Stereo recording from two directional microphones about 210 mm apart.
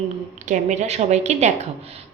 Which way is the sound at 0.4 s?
35° right (ahead or behind).